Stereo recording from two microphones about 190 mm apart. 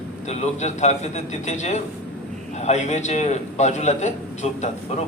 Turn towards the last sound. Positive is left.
turn(degrees=40)  # may be behind; listen again after turning